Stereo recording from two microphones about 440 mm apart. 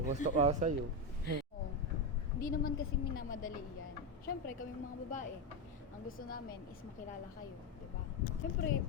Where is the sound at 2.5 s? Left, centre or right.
Centre.